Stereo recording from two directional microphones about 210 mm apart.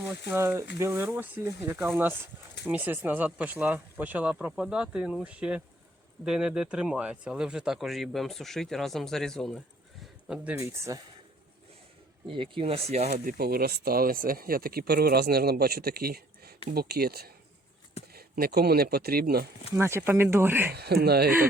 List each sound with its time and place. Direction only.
0.3 s speech: 10° right (ahead or behind)
10.0 s a sound: 5° right (ahead or behind)
10.9 s speech: 15° right (ahead or behind)
12.3 s speech: 25° right (ahead or behind); by 19.5 s 45° right (ahead or behind)
19.7 s speech: 10° right (ahead or behind)
20.7 s speech: 50° right (ahead or behind)